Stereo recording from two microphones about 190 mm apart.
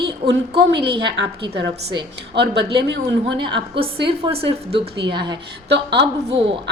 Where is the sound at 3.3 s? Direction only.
25° right (ahead or behind).